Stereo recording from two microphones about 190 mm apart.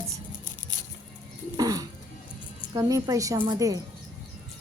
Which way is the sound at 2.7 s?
20° right (ahead or behind).